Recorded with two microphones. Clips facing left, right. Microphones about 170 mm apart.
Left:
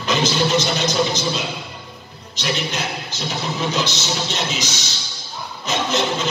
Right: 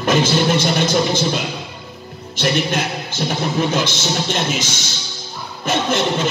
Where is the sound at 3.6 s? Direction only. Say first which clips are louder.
Right 3 dB; 50° right (ahead or behind).